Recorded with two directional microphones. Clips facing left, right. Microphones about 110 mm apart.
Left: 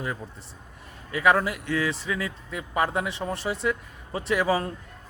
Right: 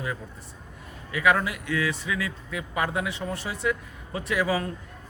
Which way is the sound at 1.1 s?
30° left (ahead or behind).